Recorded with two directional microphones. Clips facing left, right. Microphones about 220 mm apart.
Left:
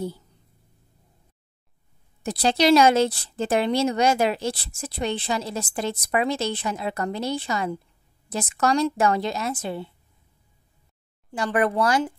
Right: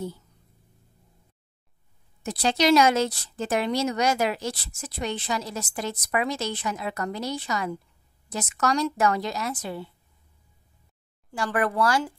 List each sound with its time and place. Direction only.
2.2 s a woman's voice: 35° left (ahead or behind)
11.3 s a woman's voice: 20° left (ahead or behind)